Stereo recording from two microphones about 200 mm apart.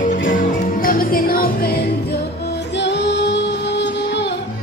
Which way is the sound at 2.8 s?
60° left (ahead or behind).